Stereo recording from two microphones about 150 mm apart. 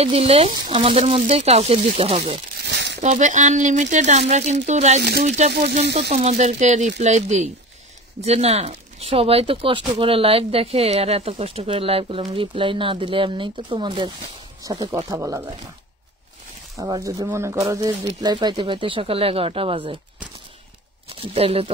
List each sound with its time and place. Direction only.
0.0 s speech: 40° right (ahead or behind)
3.0 s speech: 50° right (ahead or behind)
5.5 s speech: 90° right
6.1 s speech: 50° right (ahead or behind); by 15.5 s 20° right (ahead or behind)
16.7 s speech: 20° right (ahead or behind)
21.1 s speech: 40° right (ahead or behind)